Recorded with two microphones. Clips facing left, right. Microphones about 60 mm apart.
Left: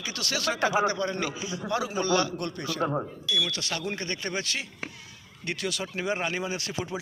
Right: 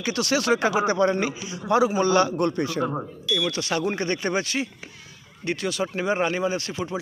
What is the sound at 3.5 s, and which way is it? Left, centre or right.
A man's voice, centre.